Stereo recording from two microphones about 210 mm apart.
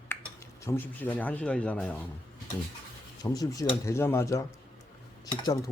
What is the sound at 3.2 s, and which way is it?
Cutlery, 15° left (ahead or behind).